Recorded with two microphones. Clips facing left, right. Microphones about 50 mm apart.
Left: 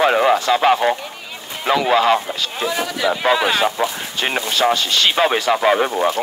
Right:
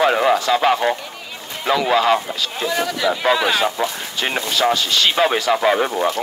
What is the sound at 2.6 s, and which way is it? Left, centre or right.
Speech, centre.